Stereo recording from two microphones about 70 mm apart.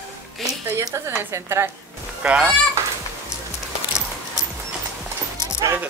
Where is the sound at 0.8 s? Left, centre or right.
Right.